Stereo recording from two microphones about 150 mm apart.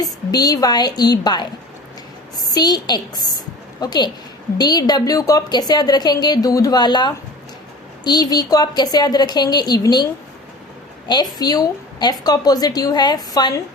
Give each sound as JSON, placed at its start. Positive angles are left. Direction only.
{"t": 0.0, "sound": "a woman's voice", "side_deg": 25}
{"t": 11.1, "sound": "a woman's voice", "side_deg": 25}